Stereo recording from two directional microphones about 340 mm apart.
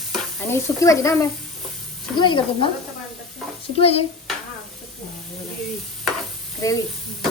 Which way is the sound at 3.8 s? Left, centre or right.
Centre.